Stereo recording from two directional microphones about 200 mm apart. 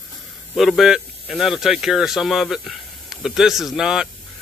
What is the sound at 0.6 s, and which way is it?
A man's voice, centre (ahead or behind).